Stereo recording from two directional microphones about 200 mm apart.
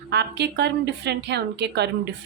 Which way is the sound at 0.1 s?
55° right (ahead or behind).